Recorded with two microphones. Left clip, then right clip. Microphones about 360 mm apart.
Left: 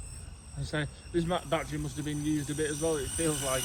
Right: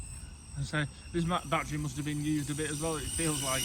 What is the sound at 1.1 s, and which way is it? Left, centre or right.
Speech, centre.